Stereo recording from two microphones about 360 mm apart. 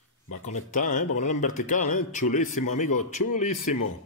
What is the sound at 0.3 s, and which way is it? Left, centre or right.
A man's voice, left.